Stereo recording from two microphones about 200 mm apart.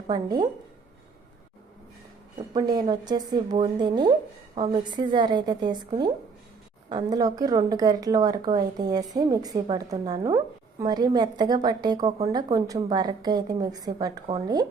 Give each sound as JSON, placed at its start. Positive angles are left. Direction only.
{"t": 0.1, "sound": "speech", "side_deg": -20}
{"t": 2.5, "sound": "speech", "side_deg": -20}